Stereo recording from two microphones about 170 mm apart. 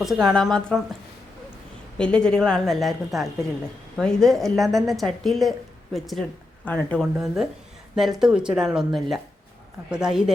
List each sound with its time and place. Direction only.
0.0 s a woman's voice: centre (ahead or behind)
2.0 s a woman's voice: 5° left (ahead or behind)